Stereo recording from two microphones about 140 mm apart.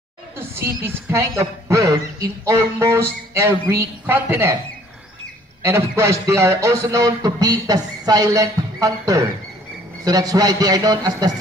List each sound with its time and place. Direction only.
0.4 s a man's voice: 15° right (ahead or behind)
5.6 s a man's voice: 20° right (ahead or behind)